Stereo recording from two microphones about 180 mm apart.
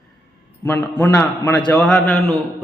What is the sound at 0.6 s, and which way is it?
A man's voice, 10° left (ahead or behind).